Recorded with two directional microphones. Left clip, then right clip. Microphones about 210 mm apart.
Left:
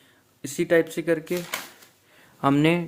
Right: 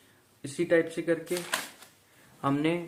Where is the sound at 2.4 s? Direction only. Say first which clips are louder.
Left 7 dB; 50° left (ahead or behind).